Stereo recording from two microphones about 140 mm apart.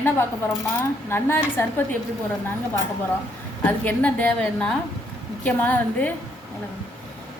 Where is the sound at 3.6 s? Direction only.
10° left (ahead or behind).